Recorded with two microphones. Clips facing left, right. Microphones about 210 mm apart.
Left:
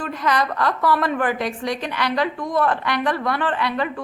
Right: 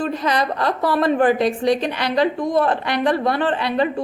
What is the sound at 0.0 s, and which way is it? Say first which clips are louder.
A woman's voice: right 2 dB; 30° right (ahead or behind).